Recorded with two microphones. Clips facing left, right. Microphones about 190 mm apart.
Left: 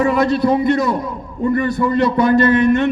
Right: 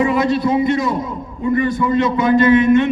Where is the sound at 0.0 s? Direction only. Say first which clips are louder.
Left 1 dB; 45° left (ahead or behind).